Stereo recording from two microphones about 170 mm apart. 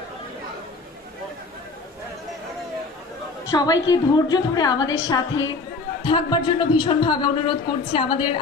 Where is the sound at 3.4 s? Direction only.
20° left (ahead or behind).